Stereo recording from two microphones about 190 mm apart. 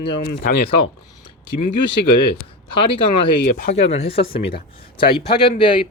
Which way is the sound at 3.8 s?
35° left (ahead or behind).